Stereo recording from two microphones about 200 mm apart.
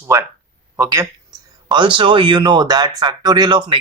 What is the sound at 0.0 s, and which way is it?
A man's voice, 15° right (ahead or behind).